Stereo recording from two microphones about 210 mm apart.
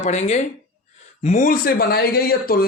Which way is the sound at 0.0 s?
30° left (ahead or behind).